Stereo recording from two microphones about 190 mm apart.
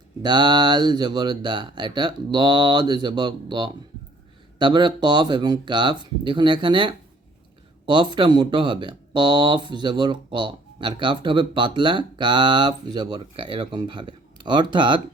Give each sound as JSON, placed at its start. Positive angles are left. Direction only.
{"t": 0.2, "sound": "speech", "side_deg": -25}